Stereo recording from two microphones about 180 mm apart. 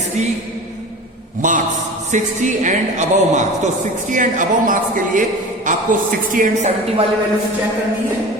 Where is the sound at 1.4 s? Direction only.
45° right (ahead or behind).